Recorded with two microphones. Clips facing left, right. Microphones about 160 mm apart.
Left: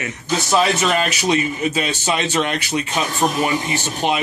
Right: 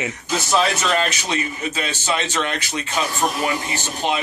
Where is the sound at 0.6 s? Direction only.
10° left (ahead or behind).